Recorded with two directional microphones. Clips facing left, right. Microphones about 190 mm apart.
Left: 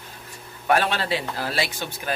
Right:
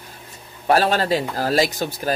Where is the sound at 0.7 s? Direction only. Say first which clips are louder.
Right 4 dB; 40° right (ahead or behind).